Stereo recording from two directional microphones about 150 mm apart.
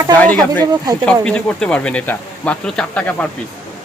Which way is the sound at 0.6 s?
25° right (ahead or behind).